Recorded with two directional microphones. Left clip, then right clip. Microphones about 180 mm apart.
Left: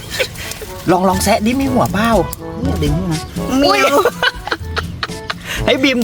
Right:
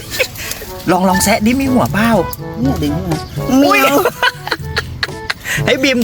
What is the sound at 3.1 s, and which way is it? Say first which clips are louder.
Music: right 3 dB; centre (ahead or behind).